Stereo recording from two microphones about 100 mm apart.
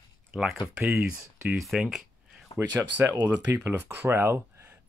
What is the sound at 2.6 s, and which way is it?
Speech, 30° right (ahead or behind).